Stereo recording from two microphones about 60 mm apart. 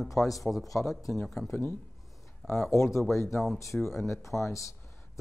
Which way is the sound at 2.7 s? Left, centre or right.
Left.